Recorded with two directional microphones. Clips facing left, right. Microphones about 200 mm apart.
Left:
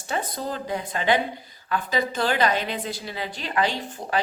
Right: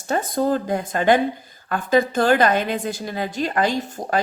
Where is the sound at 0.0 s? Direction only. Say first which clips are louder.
Right 8 dB; 45° right (ahead or behind).